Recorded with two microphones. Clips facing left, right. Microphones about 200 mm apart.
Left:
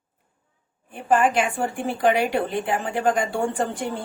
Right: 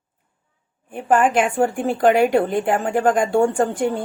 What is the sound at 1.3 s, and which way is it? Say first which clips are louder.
A woman's voice: right 5 dB; 50° right (ahead or behind).